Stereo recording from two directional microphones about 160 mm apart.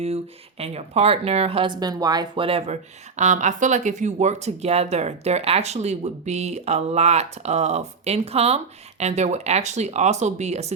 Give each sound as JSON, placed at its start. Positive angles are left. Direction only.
{"t": 0.6, "sound": "speech", "side_deg": -40}
{"t": 3.2, "sound": "speech", "side_deg": -50}